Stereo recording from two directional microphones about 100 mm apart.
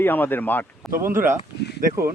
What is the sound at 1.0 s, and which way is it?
Speech, 25° right (ahead or behind).